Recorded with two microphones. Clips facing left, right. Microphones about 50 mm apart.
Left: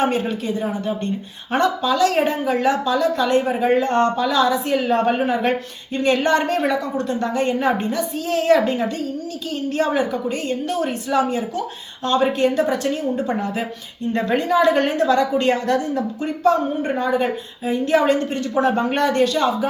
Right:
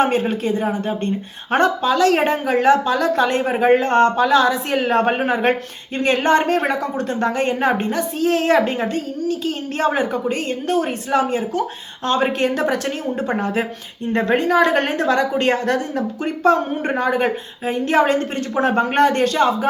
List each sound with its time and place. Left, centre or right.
0.0 s a woman's voice: right